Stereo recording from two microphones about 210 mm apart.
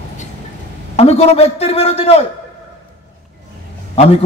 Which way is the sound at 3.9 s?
30° left (ahead or behind).